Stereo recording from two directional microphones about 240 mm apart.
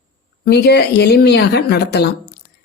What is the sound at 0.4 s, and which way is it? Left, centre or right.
Speech, left.